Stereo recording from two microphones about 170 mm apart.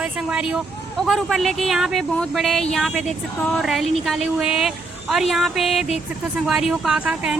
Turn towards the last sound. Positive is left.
turn(degrees=-5)  # may be behind; listen again after turning